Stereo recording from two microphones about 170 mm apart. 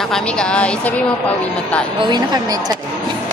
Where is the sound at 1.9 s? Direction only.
25° right (ahead or behind).